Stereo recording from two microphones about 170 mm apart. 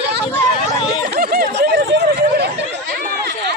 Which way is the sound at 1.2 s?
65° right (ahead or behind).